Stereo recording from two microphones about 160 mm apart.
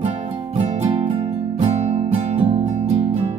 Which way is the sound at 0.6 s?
40° right (ahead or behind).